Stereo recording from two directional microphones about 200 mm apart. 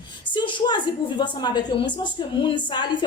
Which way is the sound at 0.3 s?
25° left (ahead or behind).